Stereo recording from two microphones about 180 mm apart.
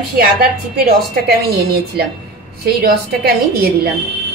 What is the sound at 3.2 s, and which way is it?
Speech, 60° right (ahead or behind).